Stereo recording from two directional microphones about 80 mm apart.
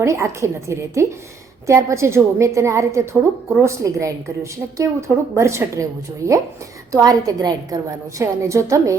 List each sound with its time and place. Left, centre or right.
0.0 s a woman's voice: right
8.2 s a woman's voice: right